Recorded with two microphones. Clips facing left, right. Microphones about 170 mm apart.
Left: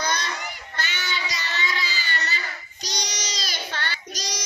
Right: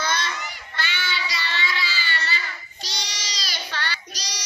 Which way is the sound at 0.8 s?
45° left (ahead or behind).